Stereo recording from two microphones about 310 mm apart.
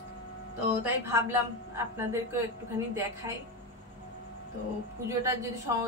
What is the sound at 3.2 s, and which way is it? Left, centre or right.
Speech, centre.